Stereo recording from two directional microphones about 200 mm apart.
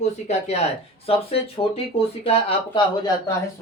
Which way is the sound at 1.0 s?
30° left (ahead or behind).